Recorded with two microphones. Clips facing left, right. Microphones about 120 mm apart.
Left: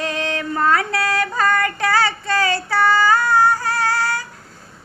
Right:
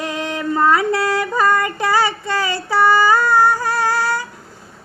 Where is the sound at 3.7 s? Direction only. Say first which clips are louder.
Right 2 dB; 15° right (ahead or behind).